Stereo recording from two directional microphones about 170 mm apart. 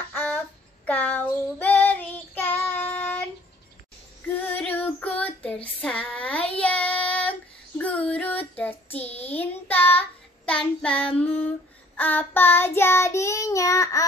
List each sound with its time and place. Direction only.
0.1 s child singing: 10° left (ahead or behind)
4.5 s child singing: 10° left (ahead or behind)
6.9 s child singing: 35° left (ahead or behind)
7.2 s child singing: 10° left (ahead or behind)